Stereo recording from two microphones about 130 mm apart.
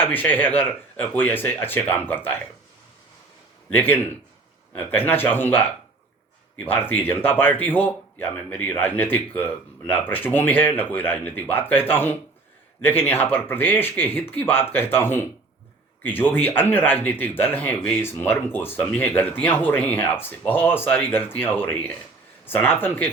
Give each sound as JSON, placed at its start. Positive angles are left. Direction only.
{"t": 0.0, "sound": "a man's voice", "side_deg": 15}
{"t": 3.7, "sound": "a man's voice", "side_deg": 15}
{"t": 6.7, "sound": "a man's voice", "side_deg": 15}